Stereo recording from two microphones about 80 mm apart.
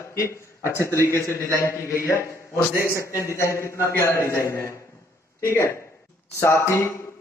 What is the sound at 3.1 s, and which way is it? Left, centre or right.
A man's voice, left.